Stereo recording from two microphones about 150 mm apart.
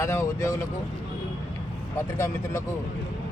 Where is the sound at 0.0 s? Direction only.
20° left (ahead or behind).